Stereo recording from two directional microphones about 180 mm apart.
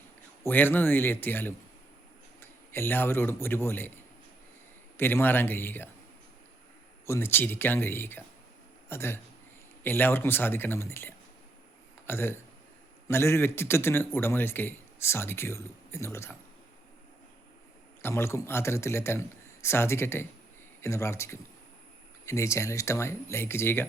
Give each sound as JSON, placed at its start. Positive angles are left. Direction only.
{"t": 0.4, "sound": "a man's voice", "side_deg": 10}
{"t": 4.9, "sound": "a man's voice", "side_deg": 10}
{"t": 7.0, "sound": "a man's voice", "side_deg": 15}
{"t": 18.0, "sound": "a man's voice", "side_deg": 15}